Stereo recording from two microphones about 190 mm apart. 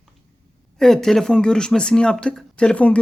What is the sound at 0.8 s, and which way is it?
Speech, centre (ahead or behind).